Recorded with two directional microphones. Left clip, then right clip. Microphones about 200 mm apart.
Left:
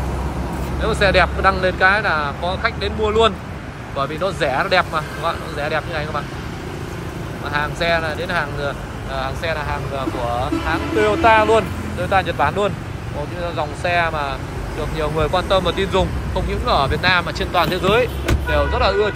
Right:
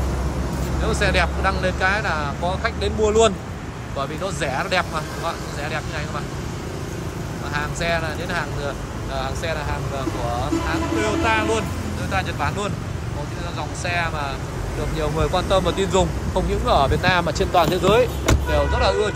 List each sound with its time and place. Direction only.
0.8 s speech: 5° right (ahead or behind)
7.5 s speech: 5° right (ahead or behind)
11.0 s speech: centre (ahead or behind)